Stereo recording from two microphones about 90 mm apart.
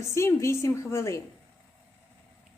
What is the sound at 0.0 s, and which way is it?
A woman's voice, 30° left (ahead or behind).